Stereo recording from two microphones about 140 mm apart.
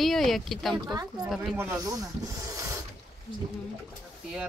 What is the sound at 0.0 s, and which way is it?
Speech, centre (ahead or behind).